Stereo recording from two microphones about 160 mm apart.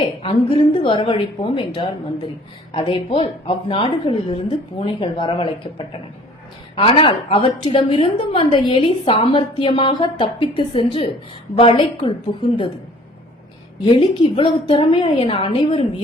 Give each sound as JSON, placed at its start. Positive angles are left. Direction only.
{"t": 0.0, "sound": "a woman's voice", "side_deg": 35}
{"t": 13.8, "sound": "a woman's voice", "side_deg": 30}